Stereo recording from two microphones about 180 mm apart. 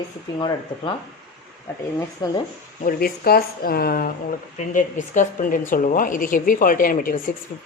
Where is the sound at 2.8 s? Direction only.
55° left (ahead or behind).